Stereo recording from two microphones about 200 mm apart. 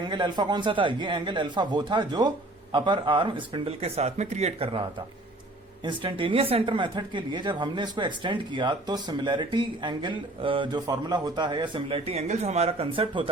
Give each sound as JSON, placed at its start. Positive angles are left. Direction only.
{"t": 0.0, "sound": "speech", "side_deg": -20}
{"t": 5.8, "sound": "speech", "side_deg": -25}